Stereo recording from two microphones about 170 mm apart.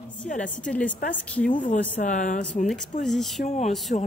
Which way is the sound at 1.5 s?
50° left (ahead or behind).